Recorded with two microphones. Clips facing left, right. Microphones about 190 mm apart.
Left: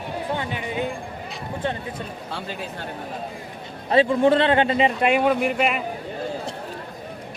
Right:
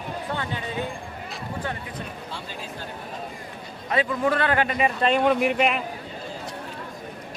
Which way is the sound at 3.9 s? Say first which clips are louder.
Left 6 dB; 30° left (ahead or behind).